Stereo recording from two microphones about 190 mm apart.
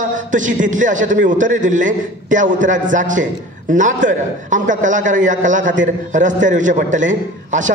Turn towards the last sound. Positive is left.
turn(degrees=-40)  # may be behind; listen again after turning